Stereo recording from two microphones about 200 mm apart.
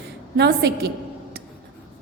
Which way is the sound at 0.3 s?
55° right (ahead or behind).